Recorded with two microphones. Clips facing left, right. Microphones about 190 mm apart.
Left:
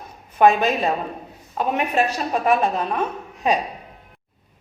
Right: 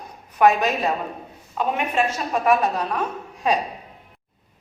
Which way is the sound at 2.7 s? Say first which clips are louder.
Left 2 dB; 20° left (ahead or behind).